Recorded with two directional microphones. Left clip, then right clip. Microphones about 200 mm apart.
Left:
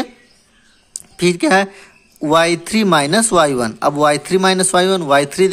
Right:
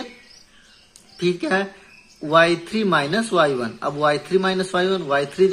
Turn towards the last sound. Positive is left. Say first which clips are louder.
# left 6 dB
turn(degrees=40)  # may be behind; listen again after turning